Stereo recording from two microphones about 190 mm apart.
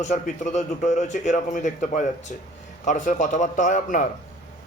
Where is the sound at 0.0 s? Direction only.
40° left (ahead or behind).